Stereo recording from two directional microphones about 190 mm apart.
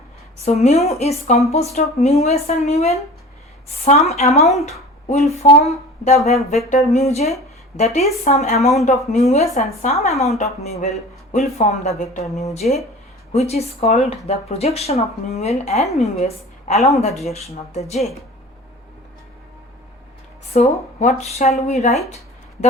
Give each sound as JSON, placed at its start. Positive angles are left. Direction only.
{"t": 0.4, "sound": "speech", "side_deg": 35}
{"t": 8.5, "sound": "speech", "side_deg": 0}
{"t": 8.8, "sound": "speech", "side_deg": 35}
{"t": 20.5, "sound": "speech", "side_deg": 35}